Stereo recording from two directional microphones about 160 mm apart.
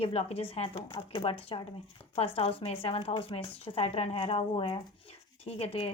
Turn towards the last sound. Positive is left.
turn(degrees=40)  # may be behind; listen again after turning